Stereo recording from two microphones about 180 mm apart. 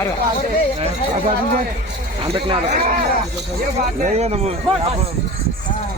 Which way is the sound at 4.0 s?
35° right (ahead or behind).